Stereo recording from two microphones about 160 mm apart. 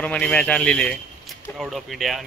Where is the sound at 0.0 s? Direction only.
5° left (ahead or behind).